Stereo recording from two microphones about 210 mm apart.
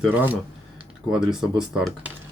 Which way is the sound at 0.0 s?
10° right (ahead or behind).